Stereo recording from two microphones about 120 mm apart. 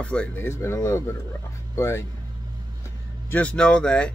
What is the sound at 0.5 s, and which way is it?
Speech, 20° left (ahead or behind).